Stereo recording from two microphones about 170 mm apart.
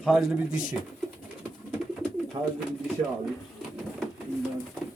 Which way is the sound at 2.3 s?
30° right (ahead or behind).